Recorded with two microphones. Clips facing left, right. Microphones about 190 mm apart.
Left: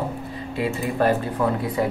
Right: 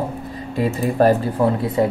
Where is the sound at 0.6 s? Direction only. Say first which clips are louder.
Right 5 dB; 40° right (ahead or behind).